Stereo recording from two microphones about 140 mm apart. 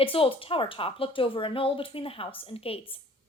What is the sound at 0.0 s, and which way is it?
A woman's voice, 40° left (ahead or behind).